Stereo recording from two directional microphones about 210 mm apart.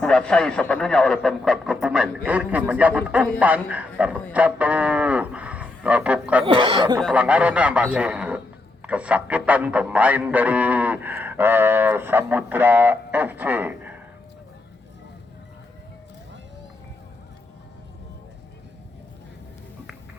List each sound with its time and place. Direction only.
0.0 s speech: 5° left (ahead or behind)
3.4 s a sound: 5° right (ahead or behind)
6.4 s speech: 25° right (ahead or behind)
7.0 s speech: 5° right (ahead or behind)